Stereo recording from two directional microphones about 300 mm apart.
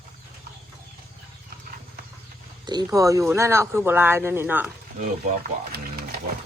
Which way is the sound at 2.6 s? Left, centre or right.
Centre.